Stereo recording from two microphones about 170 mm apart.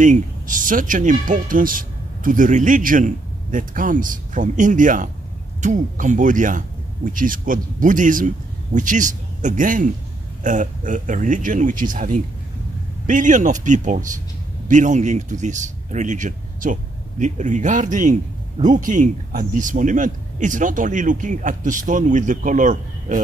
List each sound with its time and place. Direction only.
0.0 s a man's voice: 50° right (ahead or behind)